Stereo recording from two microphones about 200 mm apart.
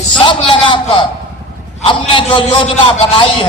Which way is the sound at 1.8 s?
25° left (ahead or behind).